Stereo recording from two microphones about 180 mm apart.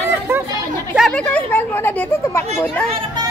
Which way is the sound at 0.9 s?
5° left (ahead or behind).